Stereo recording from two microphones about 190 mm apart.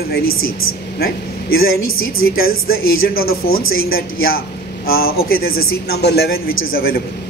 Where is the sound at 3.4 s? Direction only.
50° left (ahead or behind).